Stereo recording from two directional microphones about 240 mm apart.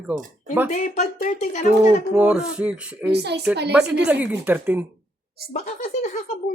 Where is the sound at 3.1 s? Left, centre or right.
Right.